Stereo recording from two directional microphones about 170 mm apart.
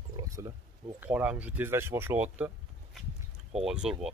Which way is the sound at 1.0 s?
10° right (ahead or behind).